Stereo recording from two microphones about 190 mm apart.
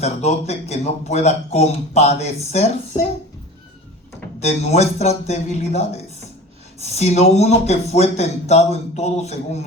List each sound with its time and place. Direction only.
0.0 s a man's voice: 35° left (ahead or behind)
4.4 s a man's voice: 35° left (ahead or behind)